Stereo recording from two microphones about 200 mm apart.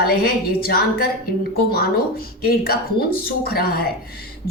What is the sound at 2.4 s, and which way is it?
A woman's voice, 50° left (ahead or behind).